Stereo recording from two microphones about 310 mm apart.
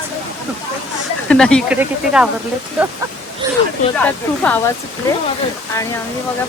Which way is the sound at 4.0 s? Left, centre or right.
Centre.